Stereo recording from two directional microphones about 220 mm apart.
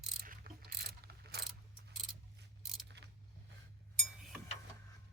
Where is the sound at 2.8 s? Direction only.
50° right (ahead or behind).